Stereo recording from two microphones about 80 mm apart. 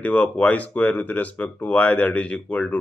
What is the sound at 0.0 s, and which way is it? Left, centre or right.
Speech, centre.